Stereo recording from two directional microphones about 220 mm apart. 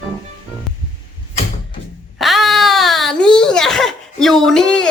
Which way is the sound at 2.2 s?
Centre (ahead or behind).